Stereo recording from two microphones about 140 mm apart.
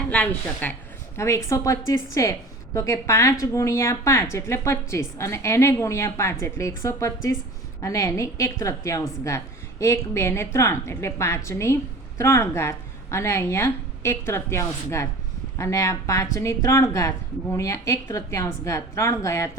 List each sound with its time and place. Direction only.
0.1 s a woman's voice: 10° left (ahead or behind)